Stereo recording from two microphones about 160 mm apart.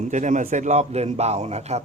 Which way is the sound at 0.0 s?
50° right (ahead or behind).